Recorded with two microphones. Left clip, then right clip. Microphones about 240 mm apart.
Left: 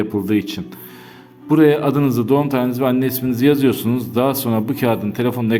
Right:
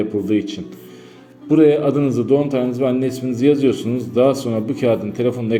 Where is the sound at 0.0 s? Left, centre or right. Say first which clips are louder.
Even; left.